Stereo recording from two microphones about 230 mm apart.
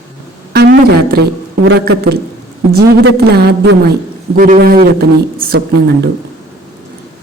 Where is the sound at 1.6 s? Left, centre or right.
Right.